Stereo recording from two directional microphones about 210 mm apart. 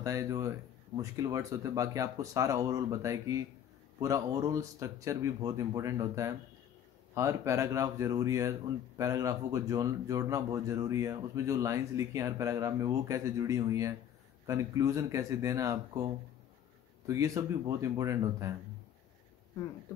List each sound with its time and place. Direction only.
0.0 s speech: 15° right (ahead or behind)
17.0 s speech: 15° right (ahead or behind)